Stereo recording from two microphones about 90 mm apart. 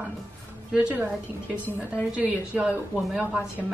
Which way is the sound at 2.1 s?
15° right (ahead or behind).